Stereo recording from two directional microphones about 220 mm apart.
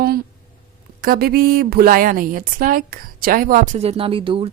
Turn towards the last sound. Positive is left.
turn(degrees=-25)  # may be behind; listen again after turning